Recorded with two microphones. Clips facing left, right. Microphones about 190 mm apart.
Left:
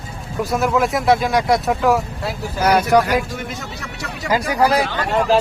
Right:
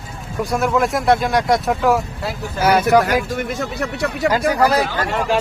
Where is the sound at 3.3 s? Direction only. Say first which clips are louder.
Right 6 dB; 55° right (ahead or behind).